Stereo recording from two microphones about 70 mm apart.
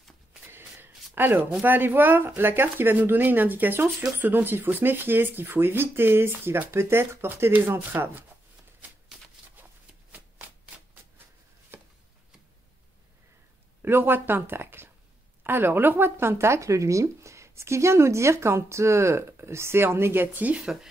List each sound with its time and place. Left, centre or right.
0.5 s shuffle: right
1.1 s speech: right
13.8 s speech: right